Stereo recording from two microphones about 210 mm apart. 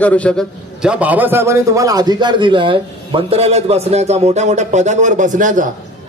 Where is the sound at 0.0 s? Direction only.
5° left (ahead or behind).